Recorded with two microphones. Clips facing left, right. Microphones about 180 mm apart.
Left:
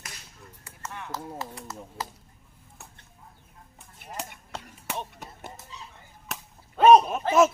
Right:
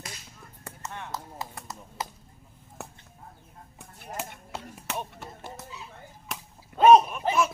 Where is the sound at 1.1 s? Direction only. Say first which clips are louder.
Left 2 dB; 20° right (ahead or behind).